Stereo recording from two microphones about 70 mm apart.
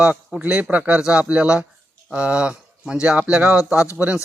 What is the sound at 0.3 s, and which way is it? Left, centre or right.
Speech, centre.